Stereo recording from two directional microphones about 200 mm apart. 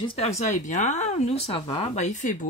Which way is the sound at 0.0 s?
25° left (ahead or behind).